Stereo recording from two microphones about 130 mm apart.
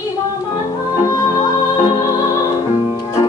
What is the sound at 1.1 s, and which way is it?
Music, 30° left (ahead or behind).